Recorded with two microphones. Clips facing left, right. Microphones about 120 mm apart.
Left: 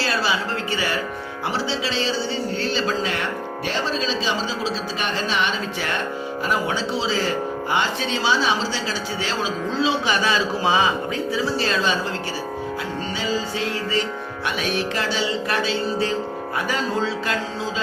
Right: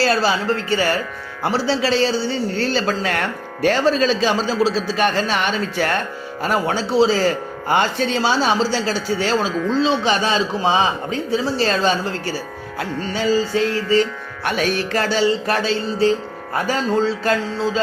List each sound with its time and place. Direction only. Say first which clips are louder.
0.0 s speech: right 5 dB; 40° right (ahead or behind)
13.1 s speech: right 9 dB; 45° right (ahead or behind)